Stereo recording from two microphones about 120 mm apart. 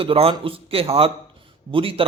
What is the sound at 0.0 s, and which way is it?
A man's voice, 50° right (ahead or behind).